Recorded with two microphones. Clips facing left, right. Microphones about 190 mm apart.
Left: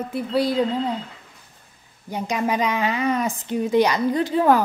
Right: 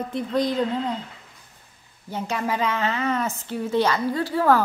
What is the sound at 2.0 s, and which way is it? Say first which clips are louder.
A woman's voice: left 3 dB; 15° left (ahead or behind).